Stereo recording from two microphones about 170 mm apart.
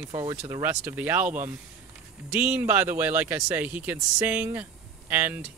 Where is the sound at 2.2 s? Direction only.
10° right (ahead or behind).